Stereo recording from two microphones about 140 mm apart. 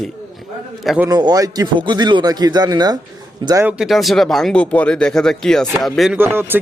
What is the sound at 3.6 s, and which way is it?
A man's voice, centre (ahead or behind).